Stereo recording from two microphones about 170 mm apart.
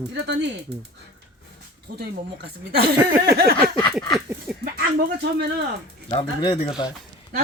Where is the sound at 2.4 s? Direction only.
70° right (ahead or behind).